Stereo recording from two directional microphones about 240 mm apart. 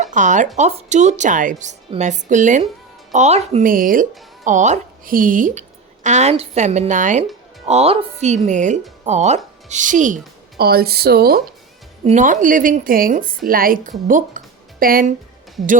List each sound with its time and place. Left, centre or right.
0.0 s a woman's voice: right
14.1 s music: right